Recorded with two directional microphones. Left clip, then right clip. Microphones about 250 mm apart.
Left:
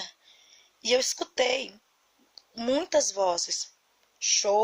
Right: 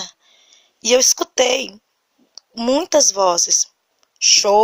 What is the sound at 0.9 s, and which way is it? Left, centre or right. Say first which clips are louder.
Speech: right 11 dB; right.